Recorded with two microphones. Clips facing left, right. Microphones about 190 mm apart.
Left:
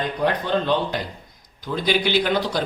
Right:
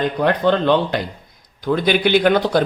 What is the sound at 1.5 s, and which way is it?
A man's voice, 60° right (ahead or behind).